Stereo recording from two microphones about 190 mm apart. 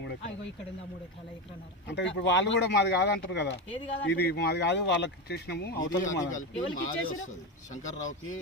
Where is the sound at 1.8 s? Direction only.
70° left (ahead or behind); by 6.9 s 40° left (ahead or behind).